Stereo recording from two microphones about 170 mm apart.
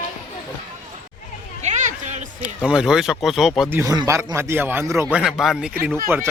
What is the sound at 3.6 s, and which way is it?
Speech, 15° right (ahead or behind).